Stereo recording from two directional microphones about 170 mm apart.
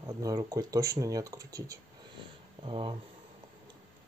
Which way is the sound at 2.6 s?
30° right (ahead or behind).